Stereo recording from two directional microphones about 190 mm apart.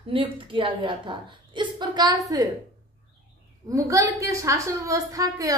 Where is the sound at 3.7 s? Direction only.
15° right (ahead or behind).